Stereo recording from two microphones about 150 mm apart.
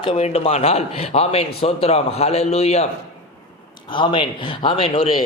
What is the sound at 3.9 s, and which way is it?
A man's voice, 35° left (ahead or behind).